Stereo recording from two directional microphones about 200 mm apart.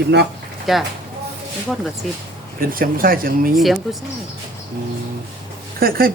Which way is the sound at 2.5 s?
45° right (ahead or behind).